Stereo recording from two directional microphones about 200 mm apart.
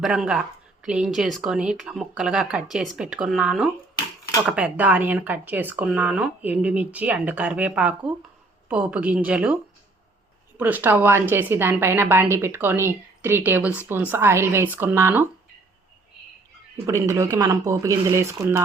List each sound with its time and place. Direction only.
0.0 s a woman's voice: centre (ahead or behind)
10.6 s a woman's voice: 10° right (ahead or behind)
16.8 s a woman's voice: 15° right (ahead or behind)